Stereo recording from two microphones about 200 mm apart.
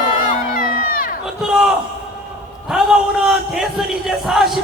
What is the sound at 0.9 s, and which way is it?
Crowd, 45° left (ahead or behind).